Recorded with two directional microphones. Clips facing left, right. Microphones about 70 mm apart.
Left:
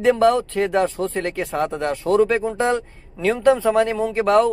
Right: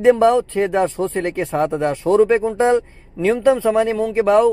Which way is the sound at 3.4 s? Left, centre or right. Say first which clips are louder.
Even; centre.